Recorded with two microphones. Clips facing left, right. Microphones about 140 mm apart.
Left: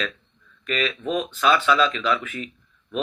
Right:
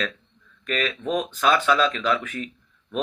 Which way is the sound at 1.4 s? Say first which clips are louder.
Left 1 dB; 45° right (ahead or behind).